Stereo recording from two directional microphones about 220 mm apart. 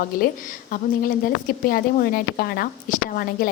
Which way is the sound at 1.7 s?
40° left (ahead or behind).